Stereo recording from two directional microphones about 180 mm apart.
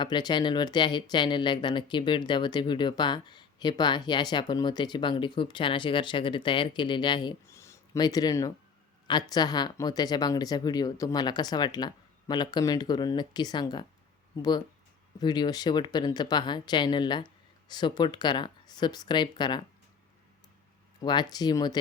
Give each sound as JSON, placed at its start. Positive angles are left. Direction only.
{"t": 0.0, "sound": "speech", "side_deg": 25}
{"t": 15.2, "sound": "speech", "side_deg": 25}
{"t": 21.0, "sound": "speech", "side_deg": 25}